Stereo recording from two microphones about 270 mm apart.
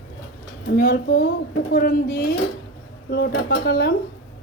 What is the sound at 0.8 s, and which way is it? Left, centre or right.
Speech, left.